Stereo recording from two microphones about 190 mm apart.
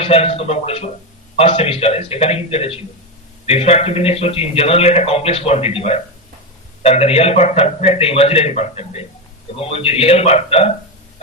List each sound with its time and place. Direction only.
0.0 s a man's voice: 30° left (ahead or behind)